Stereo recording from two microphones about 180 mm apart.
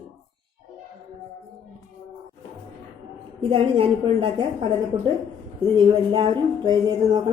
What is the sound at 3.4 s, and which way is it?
Speech, 30° right (ahead or behind).